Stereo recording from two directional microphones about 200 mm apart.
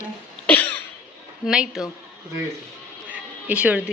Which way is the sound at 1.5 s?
Centre (ahead or behind).